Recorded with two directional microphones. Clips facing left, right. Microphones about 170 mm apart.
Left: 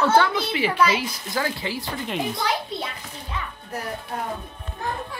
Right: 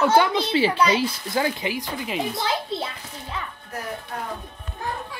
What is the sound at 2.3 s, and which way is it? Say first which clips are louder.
Children playing: right 1 dB; 25° right (ahead or behind).